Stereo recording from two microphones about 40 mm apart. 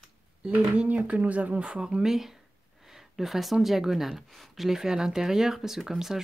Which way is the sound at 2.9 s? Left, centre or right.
Centre.